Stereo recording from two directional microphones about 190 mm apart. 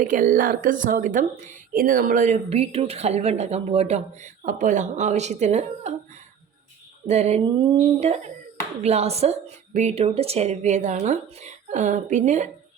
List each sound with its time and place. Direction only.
0.0 s speech: 45° right (ahead or behind)
7.1 s speech: 35° right (ahead or behind)